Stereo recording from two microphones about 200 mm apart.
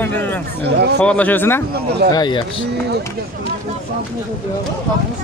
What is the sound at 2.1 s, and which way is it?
Speech, 20° left (ahead or behind).